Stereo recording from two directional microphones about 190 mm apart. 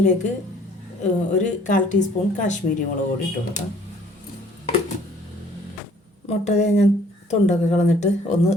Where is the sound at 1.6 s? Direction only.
40° left (ahead or behind).